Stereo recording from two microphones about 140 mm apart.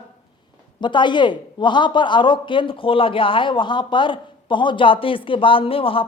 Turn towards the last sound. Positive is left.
turn(degrees=40)  # may be behind; listen again after turning